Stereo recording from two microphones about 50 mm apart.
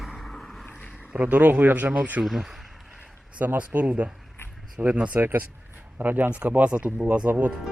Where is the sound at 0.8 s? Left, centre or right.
Left.